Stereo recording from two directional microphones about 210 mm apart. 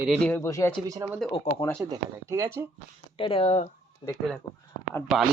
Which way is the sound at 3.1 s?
25° left (ahead or behind).